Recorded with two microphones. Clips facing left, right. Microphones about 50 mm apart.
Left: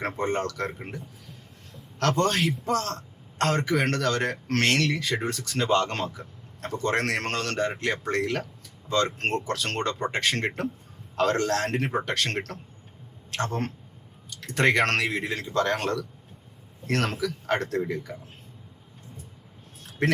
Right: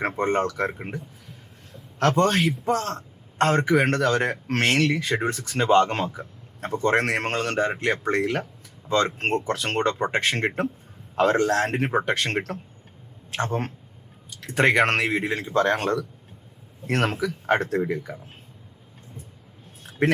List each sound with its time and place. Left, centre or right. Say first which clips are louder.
0.0 s a man's voice: right 4 dB; centre
20.0 s speech: right 3 dB; centre